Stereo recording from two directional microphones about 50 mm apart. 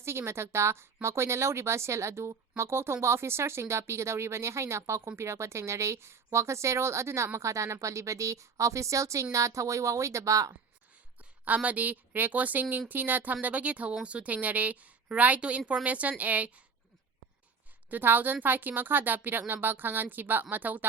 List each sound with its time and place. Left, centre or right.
0.0 s speech: right
5.1 s speech: right
7.3 s a woman's voice: right
11.4 s a woman's voice: right
17.9 s a woman's voice: right